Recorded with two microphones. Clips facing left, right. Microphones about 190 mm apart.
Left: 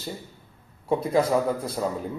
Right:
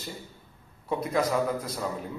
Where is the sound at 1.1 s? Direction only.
30° left (ahead or behind).